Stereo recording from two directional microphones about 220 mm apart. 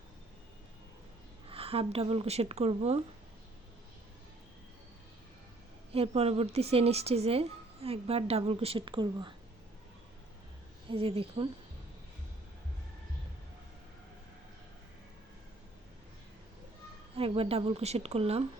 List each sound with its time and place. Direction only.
1.5 s a woman's voice: 25° right (ahead or behind)
5.9 s a woman's voice: 25° right (ahead or behind)
10.8 s a woman's voice: 25° right (ahead or behind)
17.2 s a woman's voice: 25° right (ahead or behind)